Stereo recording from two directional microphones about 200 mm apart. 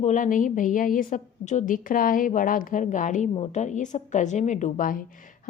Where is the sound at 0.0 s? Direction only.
40° left (ahead or behind).